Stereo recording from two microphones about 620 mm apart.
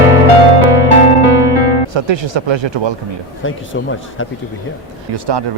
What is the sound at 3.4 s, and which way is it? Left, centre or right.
Speech, centre.